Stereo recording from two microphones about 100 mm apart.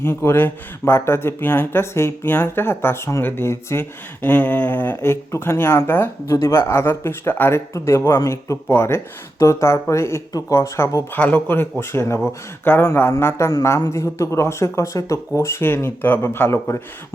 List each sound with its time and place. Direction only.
0.0 s speech: 25° left (ahead or behind)